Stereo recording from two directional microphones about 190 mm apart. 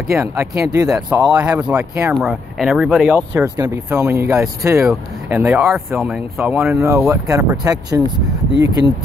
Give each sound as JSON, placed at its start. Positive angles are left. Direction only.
{"t": 0.1, "sound": "speech", "side_deg": -15}
{"t": 3.2, "sound": "speech", "side_deg": -20}